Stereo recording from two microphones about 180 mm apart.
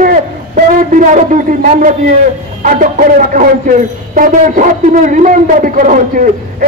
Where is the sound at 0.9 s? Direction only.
45° right (ahead or behind).